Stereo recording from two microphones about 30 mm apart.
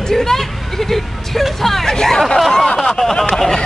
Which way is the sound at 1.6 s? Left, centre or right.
Centre.